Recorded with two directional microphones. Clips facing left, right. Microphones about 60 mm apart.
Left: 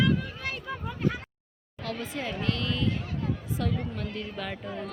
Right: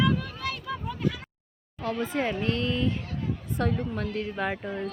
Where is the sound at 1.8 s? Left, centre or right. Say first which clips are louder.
Right 6 dB; right.